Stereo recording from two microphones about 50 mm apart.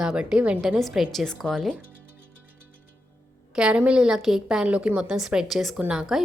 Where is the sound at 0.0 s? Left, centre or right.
Centre.